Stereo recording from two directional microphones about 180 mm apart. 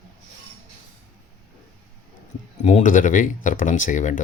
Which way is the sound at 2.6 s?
45° left (ahead or behind).